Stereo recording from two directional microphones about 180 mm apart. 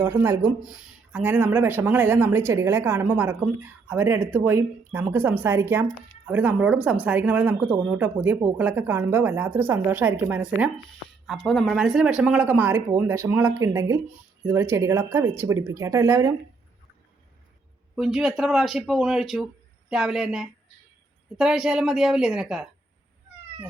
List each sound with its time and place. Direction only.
0.0 s speech: 15° right (ahead or behind)
17.9 s speech: centre (ahead or behind)